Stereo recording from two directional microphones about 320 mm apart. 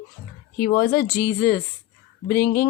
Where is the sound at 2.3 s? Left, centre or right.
Left.